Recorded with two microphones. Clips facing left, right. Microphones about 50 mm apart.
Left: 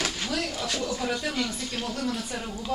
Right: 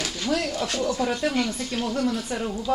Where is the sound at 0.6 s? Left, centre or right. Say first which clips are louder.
Right 4 dB; centre.